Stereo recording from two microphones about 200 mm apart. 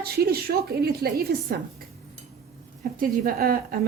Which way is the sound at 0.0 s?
50° right (ahead or behind).